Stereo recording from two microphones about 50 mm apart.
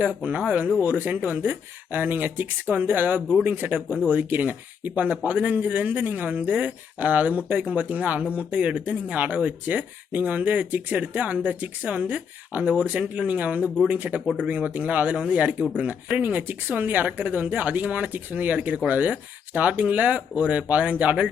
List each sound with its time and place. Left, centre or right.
0.0 s speech: right
0.8 s speech: right